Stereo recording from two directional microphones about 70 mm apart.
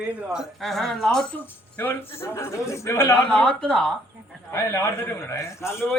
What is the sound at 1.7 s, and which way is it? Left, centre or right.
A man's voice, left.